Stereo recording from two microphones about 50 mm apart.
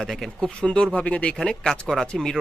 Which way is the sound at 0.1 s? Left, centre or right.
Centre.